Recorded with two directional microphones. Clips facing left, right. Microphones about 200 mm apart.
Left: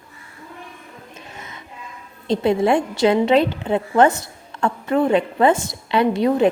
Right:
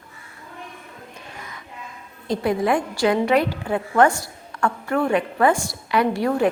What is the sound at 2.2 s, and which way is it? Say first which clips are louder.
A woman's voice: left 4 dB; 25° left (ahead or behind).